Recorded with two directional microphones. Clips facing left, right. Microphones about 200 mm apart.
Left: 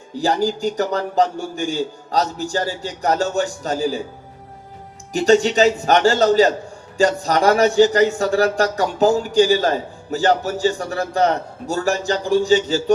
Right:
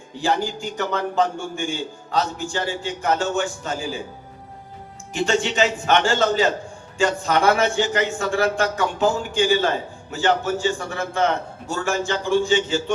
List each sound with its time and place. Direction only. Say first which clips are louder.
0.2 s speech: left 4 dB; 40° left (ahead or behind)
5.1 s speech: left 7 dB; 40° left (ahead or behind)